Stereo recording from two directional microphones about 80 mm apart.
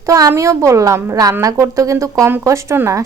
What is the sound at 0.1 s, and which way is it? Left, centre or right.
A woman's voice, right.